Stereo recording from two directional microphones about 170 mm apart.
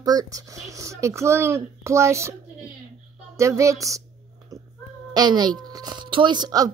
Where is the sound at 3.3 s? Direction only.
15° right (ahead or behind).